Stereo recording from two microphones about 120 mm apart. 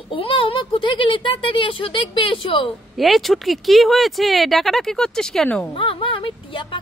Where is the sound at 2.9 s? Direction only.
Centre (ahead or behind).